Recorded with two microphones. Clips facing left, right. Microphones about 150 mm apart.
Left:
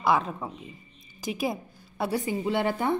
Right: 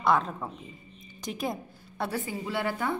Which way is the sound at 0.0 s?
5° left (ahead or behind).